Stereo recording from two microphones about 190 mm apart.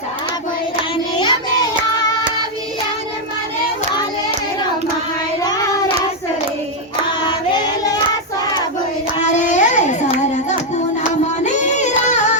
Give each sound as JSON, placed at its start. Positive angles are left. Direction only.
{"t": 1.2, "sound": "child singing", "side_deg": 20}
{"t": 5.4, "sound": "child singing", "side_deg": 20}
{"t": 9.2, "sound": "child singing", "side_deg": 40}
{"t": 11.4, "sound": "music", "side_deg": 40}